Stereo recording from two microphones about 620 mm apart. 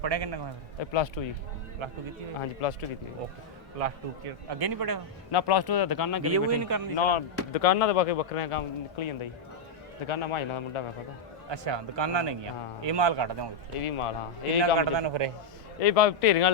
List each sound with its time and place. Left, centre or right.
0.0 s speech: right
0.8 s a man's voice: left
2.4 s a man's voice: left
4.4 s speech: right
5.3 s speech: left
6.2 s speech: right
6.9 s a man's voice: left
11.4 s a man's voice: right
13.7 s a man's voice: left
14.8 s a man's voice: right
15.8 s speech: left